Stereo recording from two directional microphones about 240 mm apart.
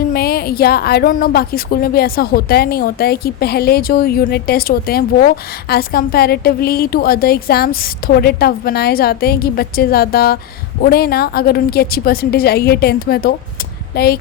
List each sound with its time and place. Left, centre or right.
0.1 s a woman's voice: left